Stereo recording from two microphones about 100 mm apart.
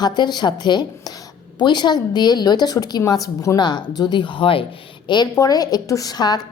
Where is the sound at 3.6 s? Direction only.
45° left (ahead or behind); by 4.6 s 60° left (ahead or behind).